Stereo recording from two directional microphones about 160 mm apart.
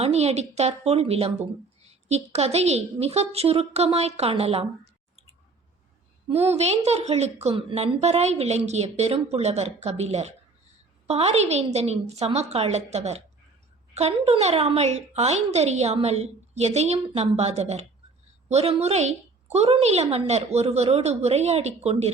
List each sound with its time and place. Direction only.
0.0 s a woman's voice: 40° right (ahead or behind)
6.2 s a woman's voice: 40° right (ahead or behind)